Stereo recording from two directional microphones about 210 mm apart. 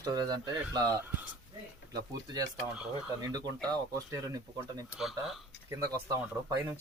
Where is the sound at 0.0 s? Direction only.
20° right (ahead or behind).